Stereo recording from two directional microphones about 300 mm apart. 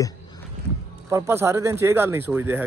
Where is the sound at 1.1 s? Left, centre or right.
Centre.